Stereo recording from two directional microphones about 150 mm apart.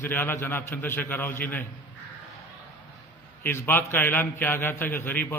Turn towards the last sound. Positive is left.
turn(degrees=15)  # may be behind; listen again after turning